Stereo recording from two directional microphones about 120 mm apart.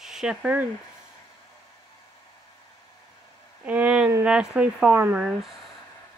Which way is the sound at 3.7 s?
10° right (ahead or behind).